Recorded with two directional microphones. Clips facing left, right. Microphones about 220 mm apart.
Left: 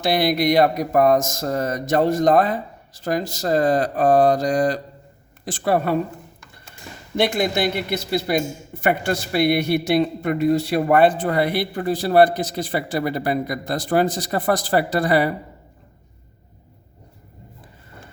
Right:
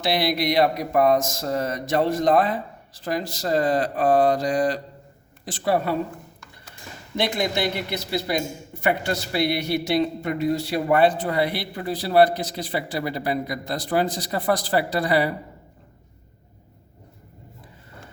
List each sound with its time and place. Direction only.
0.0 s a man's voice: 45° left (ahead or behind)
7.2 s a man's voice: 50° left (ahead or behind)